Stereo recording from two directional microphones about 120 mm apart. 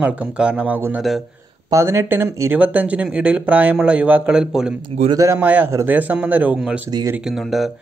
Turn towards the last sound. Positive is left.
turn(degrees=0)  # may be behind; listen again after turning